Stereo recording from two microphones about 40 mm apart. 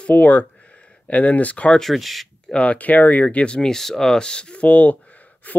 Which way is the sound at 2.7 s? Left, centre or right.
Left.